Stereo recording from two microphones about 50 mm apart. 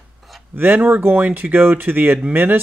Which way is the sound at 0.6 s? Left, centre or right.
Right.